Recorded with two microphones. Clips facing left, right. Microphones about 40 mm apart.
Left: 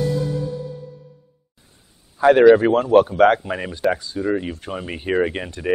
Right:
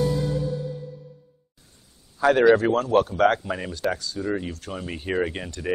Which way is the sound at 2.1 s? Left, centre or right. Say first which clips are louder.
Left 6 dB; left.